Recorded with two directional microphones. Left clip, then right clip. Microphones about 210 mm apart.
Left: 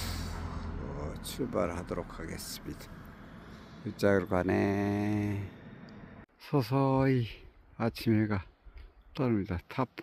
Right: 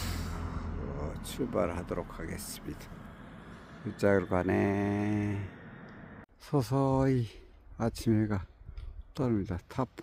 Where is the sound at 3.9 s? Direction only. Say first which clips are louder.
Even; 5° right (ahead or behind).